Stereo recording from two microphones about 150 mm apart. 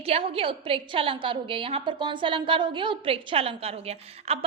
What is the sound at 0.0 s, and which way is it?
A woman's voice, 40° right (ahead or behind).